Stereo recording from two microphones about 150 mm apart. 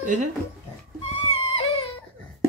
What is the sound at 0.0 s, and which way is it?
Speech, 55° right (ahead or behind).